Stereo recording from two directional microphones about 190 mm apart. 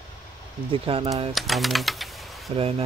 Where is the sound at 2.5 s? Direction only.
30° right (ahead or behind).